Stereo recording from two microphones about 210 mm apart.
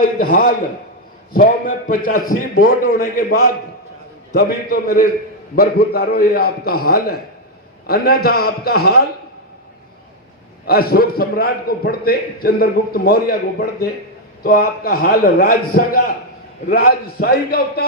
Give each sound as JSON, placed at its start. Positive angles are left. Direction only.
{"t": 0.0, "sound": "a man's voice", "side_deg": 40}
{"t": 2.1, "sound": "a man's voice", "side_deg": 90}
{"t": 2.6, "sound": "a man's voice", "side_deg": 40}
{"t": 7.9, "sound": "a man's voice", "side_deg": 45}
{"t": 10.7, "sound": "a man's voice", "side_deg": 45}